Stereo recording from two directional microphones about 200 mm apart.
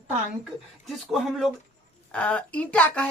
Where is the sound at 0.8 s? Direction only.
Centre (ahead or behind).